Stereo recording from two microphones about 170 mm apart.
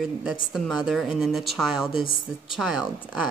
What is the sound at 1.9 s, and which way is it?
Speech, 30° left (ahead or behind).